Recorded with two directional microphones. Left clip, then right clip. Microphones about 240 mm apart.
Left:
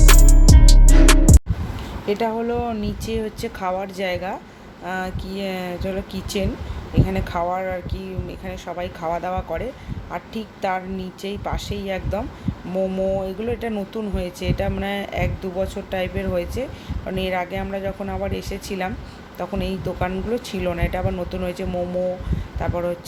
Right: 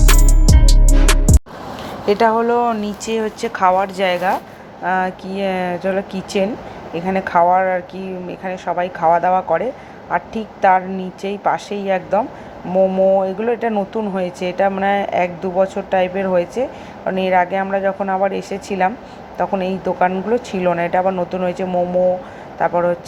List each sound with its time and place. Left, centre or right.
0.0 s music: centre
2.0 s a woman's voice: centre